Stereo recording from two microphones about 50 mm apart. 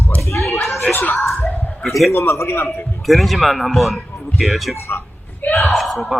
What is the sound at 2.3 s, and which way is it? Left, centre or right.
Speech, left.